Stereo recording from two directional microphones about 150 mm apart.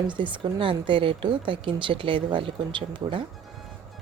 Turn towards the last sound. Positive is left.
turn(degrees=-35)  # may be behind; listen again after turning